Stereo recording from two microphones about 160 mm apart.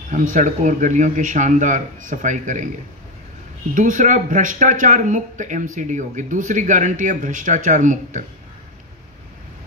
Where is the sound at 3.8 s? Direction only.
55° right (ahead or behind).